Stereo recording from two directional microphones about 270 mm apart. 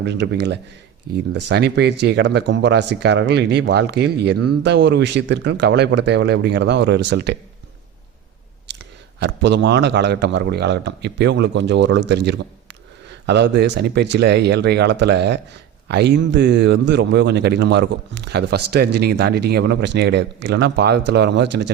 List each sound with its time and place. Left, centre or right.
0.0 s a man's voice: right
8.6 s a man's voice: right